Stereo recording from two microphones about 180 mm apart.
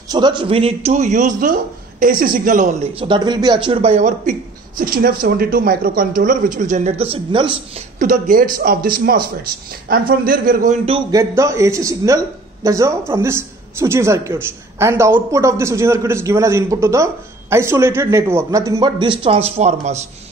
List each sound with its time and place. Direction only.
0.1 s a man's voice: 25° right (ahead or behind); by 2.9 s 45° right (ahead or behind)
2.9 s a man's voice: 30° right (ahead or behind)
8.0 s a man's voice: 50° right (ahead or behind)
10.9 s speech: 30° right (ahead or behind)
11.1 s a woman's voice: 15° right (ahead or behind); by 20.1 s 40° right (ahead or behind)